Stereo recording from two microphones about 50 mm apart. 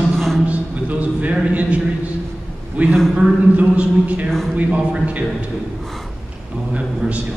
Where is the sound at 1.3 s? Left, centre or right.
Right.